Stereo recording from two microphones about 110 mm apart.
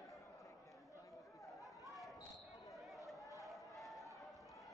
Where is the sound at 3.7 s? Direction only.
Centre (ahead or behind).